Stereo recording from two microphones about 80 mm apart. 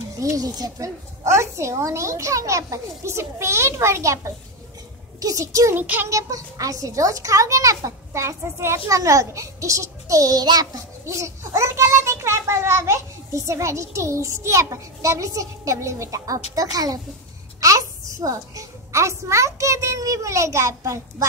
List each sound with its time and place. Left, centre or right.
0.2 s a child's voice: right
5.8 s child singing: right
6.0 s a child's voice: right